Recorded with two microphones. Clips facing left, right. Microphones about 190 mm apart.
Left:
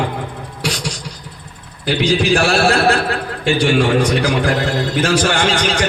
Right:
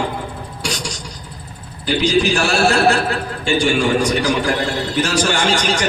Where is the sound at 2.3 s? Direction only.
55° left (ahead or behind).